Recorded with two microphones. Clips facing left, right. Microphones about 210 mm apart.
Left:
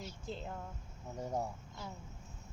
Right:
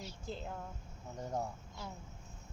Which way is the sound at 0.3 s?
Centre (ahead or behind).